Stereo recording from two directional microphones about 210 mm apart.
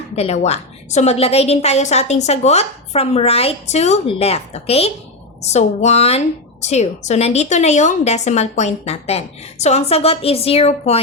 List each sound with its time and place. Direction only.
0.2 s a woman's voice: 30° left (ahead or behind)